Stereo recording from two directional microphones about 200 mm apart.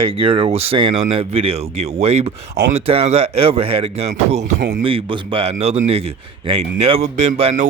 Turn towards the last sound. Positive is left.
turn(degrees=-35)  # may be behind; listen again after turning